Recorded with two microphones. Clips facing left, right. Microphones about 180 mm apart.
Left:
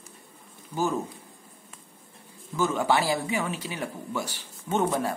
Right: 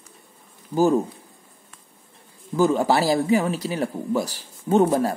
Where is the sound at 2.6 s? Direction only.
35° right (ahead or behind).